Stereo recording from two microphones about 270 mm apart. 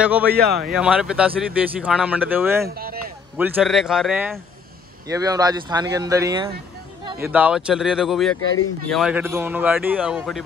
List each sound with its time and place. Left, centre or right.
0.0 s speech: centre
2.7 s a sound: right
3.3 s speech: centre
5.0 s speech: centre